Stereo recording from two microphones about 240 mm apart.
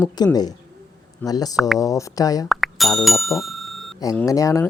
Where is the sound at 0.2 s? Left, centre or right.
Centre.